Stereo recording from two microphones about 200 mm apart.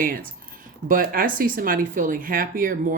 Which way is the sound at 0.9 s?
45° right (ahead or behind).